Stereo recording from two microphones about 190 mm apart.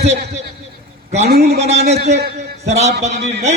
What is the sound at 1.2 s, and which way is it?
Speech, 60° right (ahead or behind).